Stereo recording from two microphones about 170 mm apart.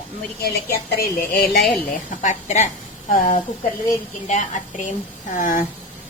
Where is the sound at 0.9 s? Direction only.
60° left (ahead or behind).